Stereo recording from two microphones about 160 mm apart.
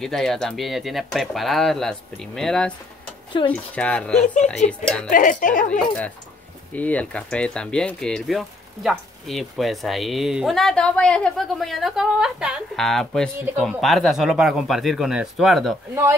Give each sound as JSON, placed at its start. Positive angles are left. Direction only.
{"t": 0.0, "sound": "speech", "side_deg": 0}
{"t": 3.4, "sound": "speech", "side_deg": 30}
{"t": 3.7, "sound": "speech", "side_deg": 5}
{"t": 5.1, "sound": "speech", "side_deg": 55}
{"t": 6.7, "sound": "speech", "side_deg": 10}